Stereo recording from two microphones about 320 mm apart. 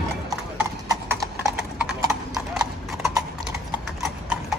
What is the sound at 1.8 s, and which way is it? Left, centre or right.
Clip-clop, centre.